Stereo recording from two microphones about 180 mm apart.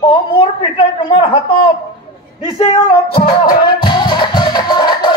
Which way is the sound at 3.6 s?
25° left (ahead or behind).